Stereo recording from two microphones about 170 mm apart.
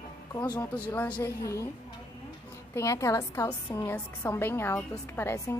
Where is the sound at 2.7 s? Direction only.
15° left (ahead or behind).